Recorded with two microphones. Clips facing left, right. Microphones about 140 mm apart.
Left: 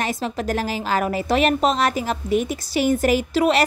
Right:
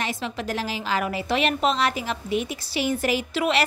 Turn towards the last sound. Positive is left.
turn(degrees=40)  # may be behind; listen again after turning